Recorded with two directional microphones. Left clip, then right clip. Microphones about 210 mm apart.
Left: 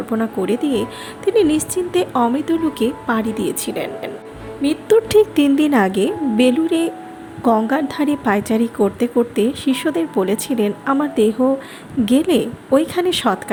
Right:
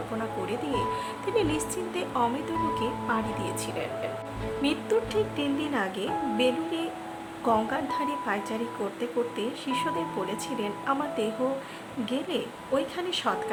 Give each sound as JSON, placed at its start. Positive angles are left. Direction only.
{"t": 0.2, "sound": "a woman's voice", "side_deg": 35}
{"t": 4.9, "sound": "a woman's voice", "side_deg": 35}